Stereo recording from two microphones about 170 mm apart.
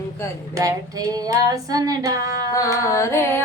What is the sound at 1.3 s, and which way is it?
Female singing, 20° right (ahead or behind).